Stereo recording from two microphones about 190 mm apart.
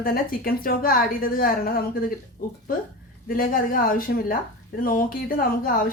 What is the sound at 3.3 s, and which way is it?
A woman's voice, 45° left (ahead or behind).